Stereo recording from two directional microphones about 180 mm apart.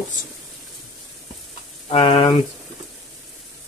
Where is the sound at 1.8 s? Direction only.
30° left (ahead or behind).